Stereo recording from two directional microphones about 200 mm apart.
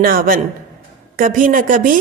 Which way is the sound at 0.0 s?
45° right (ahead or behind).